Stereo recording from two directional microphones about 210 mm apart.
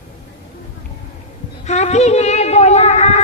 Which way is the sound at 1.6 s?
30° left (ahead or behind).